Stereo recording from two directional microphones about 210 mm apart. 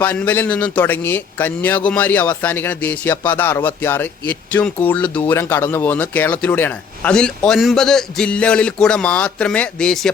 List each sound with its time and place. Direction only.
0.0 s a man's voice: 10° left (ahead or behind)